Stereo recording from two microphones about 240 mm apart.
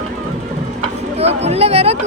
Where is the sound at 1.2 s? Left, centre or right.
Right.